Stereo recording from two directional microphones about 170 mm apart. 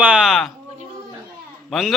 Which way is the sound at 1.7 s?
Centre (ahead or behind).